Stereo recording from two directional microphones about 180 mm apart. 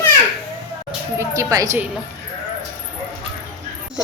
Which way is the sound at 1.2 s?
20° right (ahead or behind).